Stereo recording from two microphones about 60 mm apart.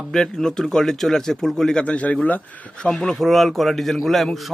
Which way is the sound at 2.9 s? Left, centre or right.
Centre.